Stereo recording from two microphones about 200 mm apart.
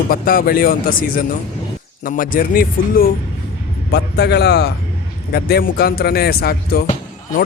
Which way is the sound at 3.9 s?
55° left (ahead or behind).